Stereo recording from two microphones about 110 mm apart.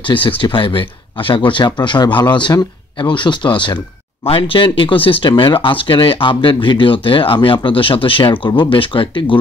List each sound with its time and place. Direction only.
0.0 s a man's voice: 50° left (ahead or behind)